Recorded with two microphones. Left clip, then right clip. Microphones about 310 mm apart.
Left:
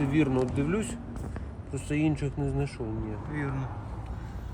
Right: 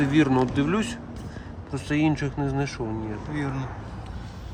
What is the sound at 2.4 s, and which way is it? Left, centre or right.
Speech, right.